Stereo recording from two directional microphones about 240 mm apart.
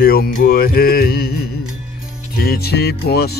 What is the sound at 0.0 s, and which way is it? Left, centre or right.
Speech, left.